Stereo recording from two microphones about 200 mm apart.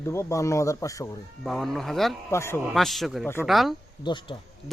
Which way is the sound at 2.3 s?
15° left (ahead or behind).